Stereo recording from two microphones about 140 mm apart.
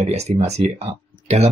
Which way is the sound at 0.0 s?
50° right (ahead or behind).